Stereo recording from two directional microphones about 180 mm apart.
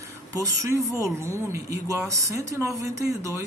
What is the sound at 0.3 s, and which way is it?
Speech, 15° right (ahead or behind).